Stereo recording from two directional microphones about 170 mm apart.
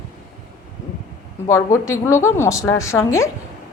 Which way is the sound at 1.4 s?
15° left (ahead or behind).